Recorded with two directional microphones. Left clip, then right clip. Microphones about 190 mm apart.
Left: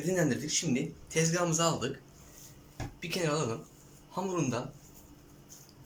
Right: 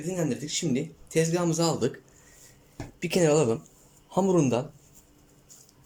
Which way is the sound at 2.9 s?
35° right (ahead or behind).